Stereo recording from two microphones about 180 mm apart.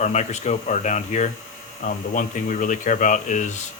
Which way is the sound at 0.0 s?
40° left (ahead or behind).